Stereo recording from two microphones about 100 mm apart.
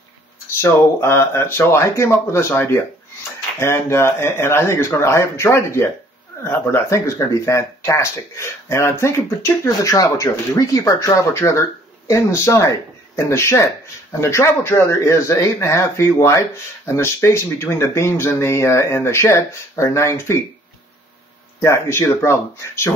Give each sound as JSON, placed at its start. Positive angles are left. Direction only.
{"t": 0.5, "sound": "speech", "side_deg": 25}
{"t": 21.5, "sound": "speech", "side_deg": 30}